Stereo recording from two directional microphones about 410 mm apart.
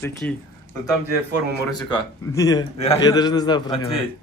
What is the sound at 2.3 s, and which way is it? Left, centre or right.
A man's voice, centre.